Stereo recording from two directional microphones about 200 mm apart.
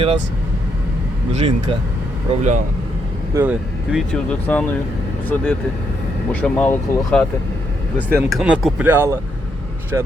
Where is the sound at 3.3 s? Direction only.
5° right (ahead or behind).